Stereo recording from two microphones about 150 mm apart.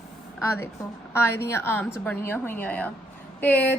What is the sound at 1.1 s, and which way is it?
A woman's voice, 15° left (ahead or behind).